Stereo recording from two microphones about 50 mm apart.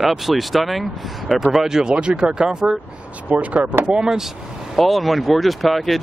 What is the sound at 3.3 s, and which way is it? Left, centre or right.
Speech, right.